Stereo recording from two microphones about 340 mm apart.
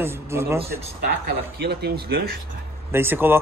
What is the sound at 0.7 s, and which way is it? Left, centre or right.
Speech, right.